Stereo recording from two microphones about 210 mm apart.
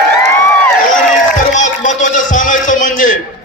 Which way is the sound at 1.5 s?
35° left (ahead or behind).